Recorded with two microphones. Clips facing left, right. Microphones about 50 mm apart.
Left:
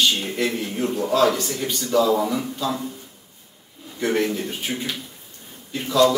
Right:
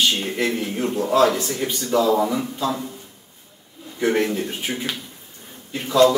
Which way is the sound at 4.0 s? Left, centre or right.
Right.